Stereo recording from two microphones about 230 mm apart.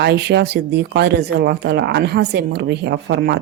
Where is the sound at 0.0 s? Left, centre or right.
Right.